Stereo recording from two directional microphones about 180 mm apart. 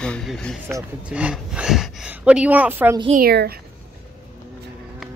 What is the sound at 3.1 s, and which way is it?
Speech, 60° right (ahead or behind).